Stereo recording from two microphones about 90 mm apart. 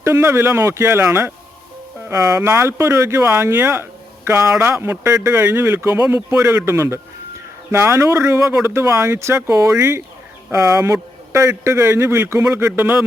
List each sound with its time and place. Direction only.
0.0 s speech: 30° right (ahead or behind)